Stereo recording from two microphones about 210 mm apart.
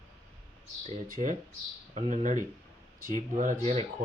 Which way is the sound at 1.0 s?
40° right (ahead or behind).